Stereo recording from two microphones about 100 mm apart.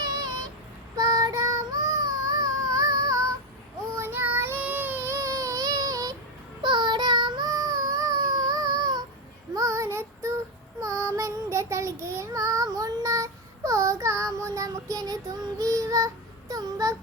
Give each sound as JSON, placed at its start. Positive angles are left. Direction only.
{"t": 0.0, "sound": "child singing", "side_deg": -40}
{"t": 3.9, "sound": "child singing", "side_deg": -25}
{"t": 6.6, "sound": "child singing", "side_deg": -50}
{"t": 9.6, "sound": "child singing", "side_deg": -30}
{"t": 16.5, "sound": "a sound", "side_deg": -35}